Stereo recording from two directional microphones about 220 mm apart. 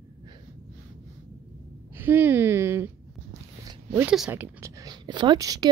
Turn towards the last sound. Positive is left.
turn(degrees=-15)  # may be behind; listen again after turning